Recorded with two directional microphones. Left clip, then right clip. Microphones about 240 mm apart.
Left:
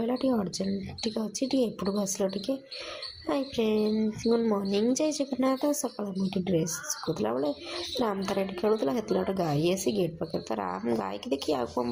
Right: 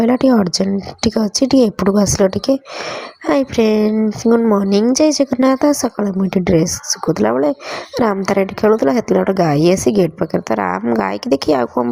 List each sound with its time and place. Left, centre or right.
0.0 s a woman's voice: right